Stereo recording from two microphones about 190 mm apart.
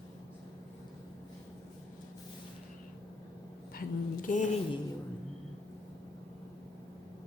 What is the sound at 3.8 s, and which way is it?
Speech, 45° left (ahead or behind).